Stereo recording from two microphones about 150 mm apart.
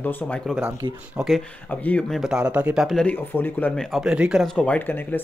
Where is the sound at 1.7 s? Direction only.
10° left (ahead or behind).